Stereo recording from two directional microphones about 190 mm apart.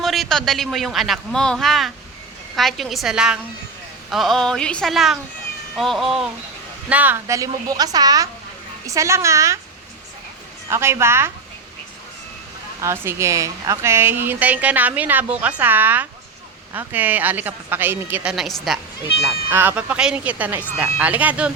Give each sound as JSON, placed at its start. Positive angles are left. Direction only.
{"t": 0.0, "sound": "a man's voice", "side_deg": 0}
{"t": 10.7, "sound": "speech", "side_deg": -15}
{"t": 12.8, "sound": "speech", "side_deg": -15}